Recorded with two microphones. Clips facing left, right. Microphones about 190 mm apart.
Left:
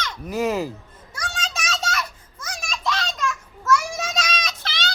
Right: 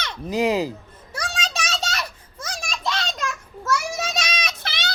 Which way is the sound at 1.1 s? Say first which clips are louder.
Right 2 dB; 35° right (ahead or behind).